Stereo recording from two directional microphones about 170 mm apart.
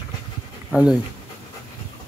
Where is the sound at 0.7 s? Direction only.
10° right (ahead or behind).